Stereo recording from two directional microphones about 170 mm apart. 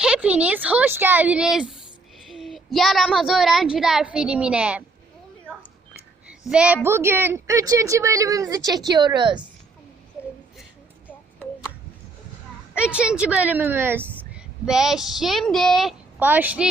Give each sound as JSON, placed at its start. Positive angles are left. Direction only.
{"t": 0.0, "sound": "a child's voice", "side_deg": -5}
{"t": 6.5, "sound": "a woman's voice", "side_deg": -5}
{"t": 12.7, "sound": "a child's voice", "side_deg": -5}